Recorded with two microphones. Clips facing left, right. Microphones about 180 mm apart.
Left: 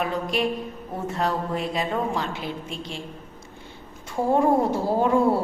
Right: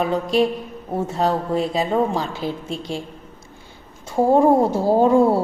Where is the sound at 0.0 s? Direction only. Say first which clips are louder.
Right 6 dB; 30° right (ahead or behind).